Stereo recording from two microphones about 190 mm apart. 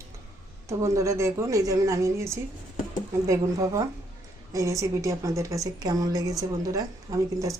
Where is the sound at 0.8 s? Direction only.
15° right (ahead or behind).